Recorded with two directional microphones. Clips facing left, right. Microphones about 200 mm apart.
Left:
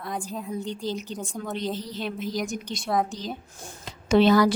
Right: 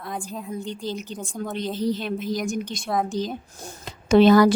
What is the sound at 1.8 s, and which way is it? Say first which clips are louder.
A woman's voice: right 6 dB; 50° right (ahead or behind).